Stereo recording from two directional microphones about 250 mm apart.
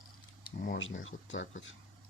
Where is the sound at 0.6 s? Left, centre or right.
Left.